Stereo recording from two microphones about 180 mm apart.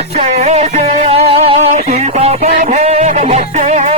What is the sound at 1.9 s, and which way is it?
Music, 40° right (ahead or behind).